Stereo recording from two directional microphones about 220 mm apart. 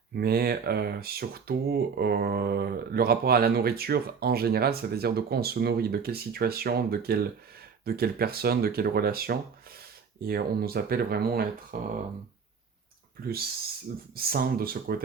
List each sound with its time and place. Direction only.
0.2 s speech: 45° right (ahead or behind)
14.2 s speech: 45° right (ahead or behind)